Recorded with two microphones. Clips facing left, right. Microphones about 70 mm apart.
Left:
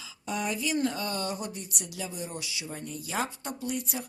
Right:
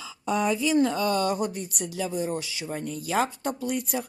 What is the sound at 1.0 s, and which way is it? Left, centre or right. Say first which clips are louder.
Speech: right 8 dB; right.